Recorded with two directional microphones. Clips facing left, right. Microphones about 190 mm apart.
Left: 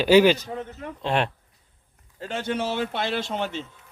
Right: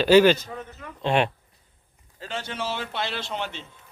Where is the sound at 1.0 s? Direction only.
Centre (ahead or behind).